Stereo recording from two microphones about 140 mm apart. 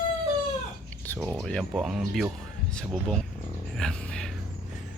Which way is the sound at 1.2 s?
5° left (ahead or behind).